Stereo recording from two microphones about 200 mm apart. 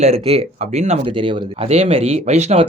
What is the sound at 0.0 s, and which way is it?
Speech, 30° right (ahead or behind).